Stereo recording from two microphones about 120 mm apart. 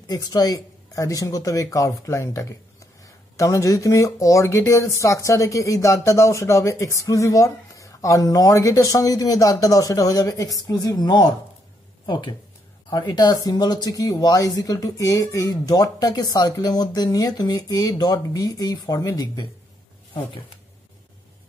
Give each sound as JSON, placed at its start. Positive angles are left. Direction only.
{"t": 0.0, "sound": "a woman's voice", "side_deg": 35}